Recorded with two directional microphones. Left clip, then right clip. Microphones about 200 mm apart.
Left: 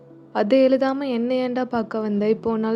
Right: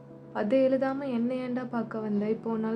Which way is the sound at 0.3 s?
45° left (ahead or behind).